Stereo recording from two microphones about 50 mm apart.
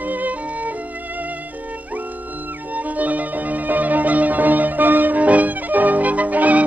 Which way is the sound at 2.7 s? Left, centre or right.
Right.